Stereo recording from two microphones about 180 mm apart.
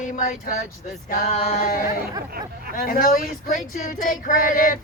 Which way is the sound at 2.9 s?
50° left (ahead or behind).